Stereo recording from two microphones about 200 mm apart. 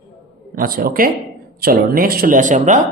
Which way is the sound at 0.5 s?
45° right (ahead or behind).